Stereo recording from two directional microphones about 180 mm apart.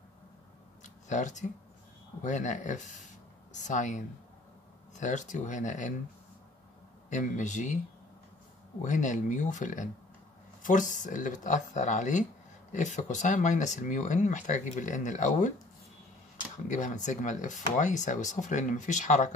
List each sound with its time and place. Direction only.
0.8 s a sound: 40° left (ahead or behind)
2.2 s speech: 40° left (ahead or behind)
7.1 s speech: 40° left (ahead or behind)
8.8 s speech: 45° left (ahead or behind)
16.6 s speech: 45° left (ahead or behind)